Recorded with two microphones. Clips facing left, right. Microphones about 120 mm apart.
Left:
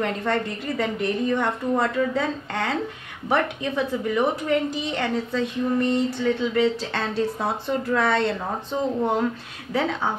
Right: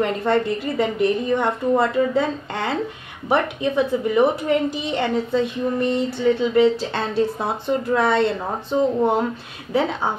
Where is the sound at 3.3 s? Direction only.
20° right (ahead or behind).